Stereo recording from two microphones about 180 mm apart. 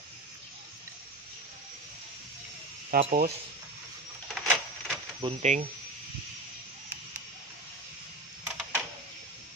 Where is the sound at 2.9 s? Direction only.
50° right (ahead or behind).